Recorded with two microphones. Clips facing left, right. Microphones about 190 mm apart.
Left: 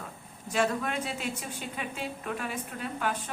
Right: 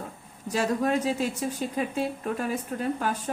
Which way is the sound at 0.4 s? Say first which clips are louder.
Right 3 dB; 40° right (ahead or behind).